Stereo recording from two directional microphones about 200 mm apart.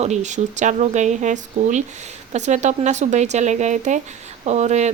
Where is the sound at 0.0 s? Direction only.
35° right (ahead or behind).